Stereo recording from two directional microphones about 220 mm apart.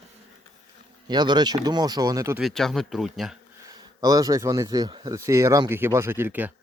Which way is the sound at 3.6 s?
15° right (ahead or behind).